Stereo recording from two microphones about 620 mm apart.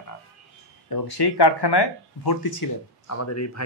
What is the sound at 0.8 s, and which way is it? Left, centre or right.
Speech, left.